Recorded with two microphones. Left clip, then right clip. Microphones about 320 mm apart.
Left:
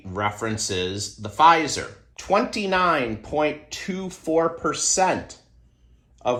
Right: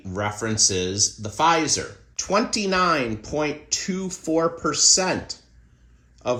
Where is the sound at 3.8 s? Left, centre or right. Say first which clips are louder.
Even; left.